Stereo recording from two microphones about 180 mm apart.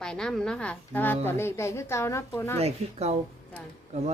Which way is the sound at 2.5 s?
35° right (ahead or behind).